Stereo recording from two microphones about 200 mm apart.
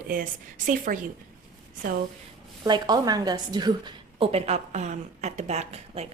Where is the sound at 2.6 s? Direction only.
20° right (ahead or behind).